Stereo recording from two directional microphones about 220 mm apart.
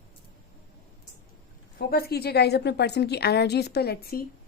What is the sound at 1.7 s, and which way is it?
A woman's voice, 45° left (ahead or behind).